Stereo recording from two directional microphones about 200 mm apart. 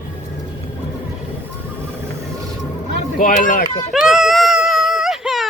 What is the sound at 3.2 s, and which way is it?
Speech, 40° left (ahead or behind).